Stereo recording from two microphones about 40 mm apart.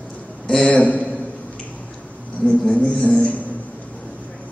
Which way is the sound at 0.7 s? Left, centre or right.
Left.